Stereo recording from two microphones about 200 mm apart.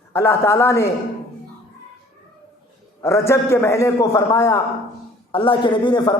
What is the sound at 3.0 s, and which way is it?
A man's voice, 15° left (ahead or behind).